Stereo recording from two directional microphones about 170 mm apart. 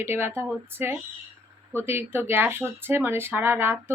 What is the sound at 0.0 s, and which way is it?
Speech, 15° right (ahead or behind).